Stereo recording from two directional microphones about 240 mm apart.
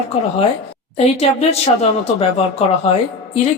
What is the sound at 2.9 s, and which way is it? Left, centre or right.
Speech, left.